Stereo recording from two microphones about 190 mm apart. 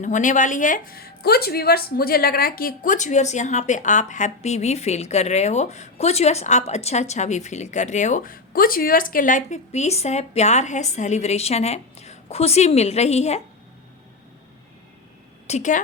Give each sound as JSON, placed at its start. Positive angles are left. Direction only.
{"t": 0.0, "sound": "speech", "side_deg": 40}
{"t": 15.4, "sound": "a woman's voice", "side_deg": 40}